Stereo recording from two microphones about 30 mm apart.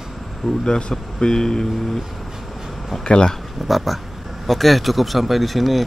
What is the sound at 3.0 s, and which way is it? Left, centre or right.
Speech, left.